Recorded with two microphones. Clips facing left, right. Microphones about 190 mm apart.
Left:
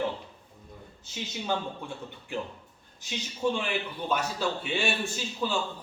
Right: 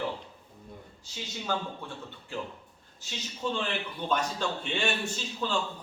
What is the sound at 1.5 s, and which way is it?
Speech, 20° left (ahead or behind).